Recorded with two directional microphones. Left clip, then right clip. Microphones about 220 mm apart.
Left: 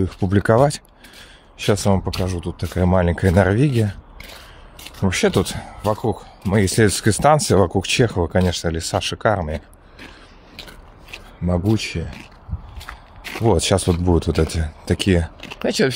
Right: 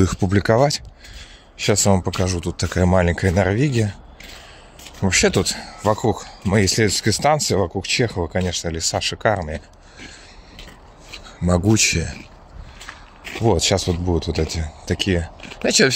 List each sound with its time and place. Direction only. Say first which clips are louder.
0.0 s speech: right 3 dB; 5° right (ahead or behind)
0.3 s speech: left 2 dB; 10° left (ahead or behind)
5.0 s speech: right 1 dB; 10° left (ahead or behind)
5.8 s speech: right 2 dB; 5° right (ahead or behind)
6.6 s speech: left 2 dB; 15° left (ahead or behind)
11.1 s speech: right 3 dB; centre (ahead or behind)
12.7 s walk: right 1 dB; 5° right (ahead or behind)
13.5 s speech: left 1 dB; 15° left (ahead or behind)
15.5 s speech: right 3 dB; 5° left (ahead or behind)